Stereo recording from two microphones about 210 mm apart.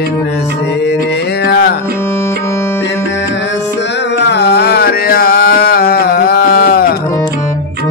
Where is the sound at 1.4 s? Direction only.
50° left (ahead or behind).